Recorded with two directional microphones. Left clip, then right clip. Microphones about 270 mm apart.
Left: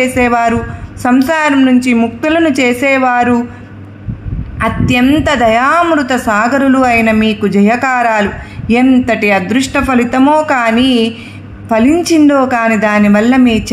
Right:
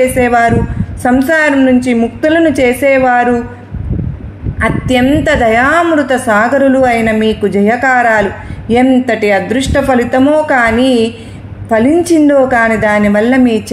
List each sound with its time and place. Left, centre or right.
0.0 s a woman's voice: left
4.6 s a woman's voice: left